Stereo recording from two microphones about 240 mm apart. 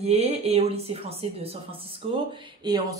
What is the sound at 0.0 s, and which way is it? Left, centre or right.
Speech, right.